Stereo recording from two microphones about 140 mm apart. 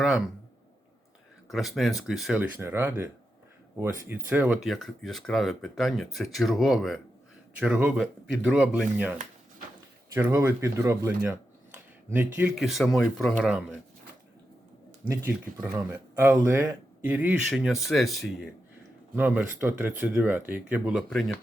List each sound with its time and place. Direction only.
0.0 s a sound: 5° right (ahead or behind)
1.5 s speech: centre (ahead or behind)
2.4 s speech: 15° right (ahead or behind)
4.6 s speech: centre (ahead or behind)
7.6 s speech: 10° right (ahead or behind)
10.2 s speech: 20° right (ahead or behind)
12.6 s speech: centre (ahead or behind)
15.0 s speech: 20° right (ahead or behind); by 18.4 s centre (ahead or behind)
19.1 s speech: 10° right (ahead or behind)